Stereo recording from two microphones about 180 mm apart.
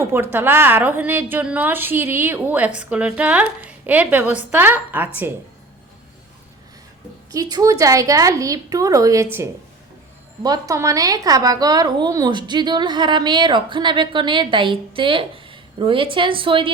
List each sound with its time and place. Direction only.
0.1 s a woman's voice: 10° right (ahead or behind)
7.3 s a woman's voice: 20° right (ahead or behind)